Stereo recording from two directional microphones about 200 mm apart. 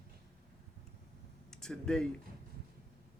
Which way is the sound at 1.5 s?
5° left (ahead or behind).